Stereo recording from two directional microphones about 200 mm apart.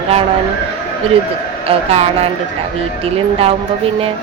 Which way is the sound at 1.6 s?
30° right (ahead or behind).